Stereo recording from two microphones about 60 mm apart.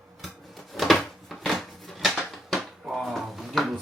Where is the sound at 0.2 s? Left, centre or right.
Centre.